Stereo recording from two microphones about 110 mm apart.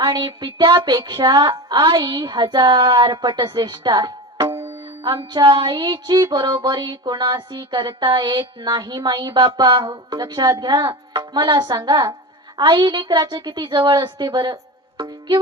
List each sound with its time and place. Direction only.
0.0 s speech: 45° right (ahead or behind)